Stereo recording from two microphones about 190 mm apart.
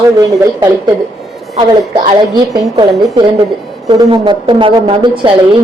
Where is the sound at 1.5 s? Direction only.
35° right (ahead or behind).